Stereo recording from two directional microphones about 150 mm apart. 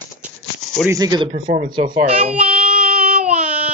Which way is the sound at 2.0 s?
65° right (ahead or behind).